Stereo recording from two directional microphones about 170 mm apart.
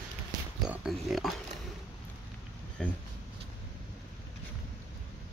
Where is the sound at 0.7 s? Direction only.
Centre (ahead or behind).